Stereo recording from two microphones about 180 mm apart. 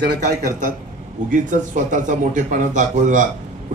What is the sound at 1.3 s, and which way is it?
A man's voice, 45° right (ahead or behind).